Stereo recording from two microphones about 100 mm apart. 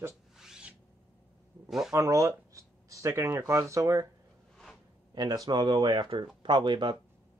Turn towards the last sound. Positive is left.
turn(degrees=-50)  # may be behind; listen again after turning